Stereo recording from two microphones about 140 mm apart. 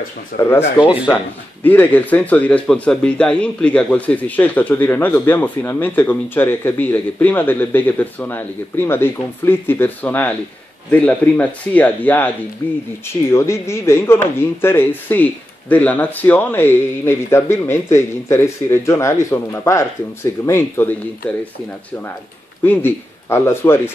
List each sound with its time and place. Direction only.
0.4 s speech: 15° left (ahead or behind)
13.3 s speech: 20° left (ahead or behind)
22.7 s speech: 15° left (ahead or behind)